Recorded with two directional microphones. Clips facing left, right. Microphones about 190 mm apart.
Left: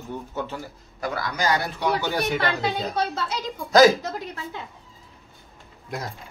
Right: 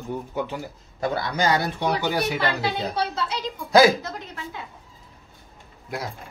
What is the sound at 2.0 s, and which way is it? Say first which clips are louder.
Speech: even; 5° right (ahead or behind).